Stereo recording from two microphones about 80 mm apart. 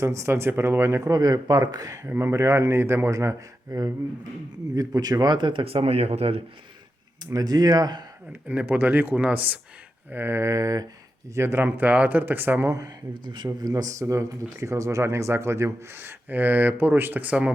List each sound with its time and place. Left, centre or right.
0.0 s speech: right
1.0 s speech: right
2.0 s speech: right
4.7 s speech: right
7.3 s speech: right
8.3 s speech: centre; by 10.8 s right
11.3 s speech: right
11.6 s speech: centre
13.1 s speech: right
14.0 s speech: right; by 17.5 s centre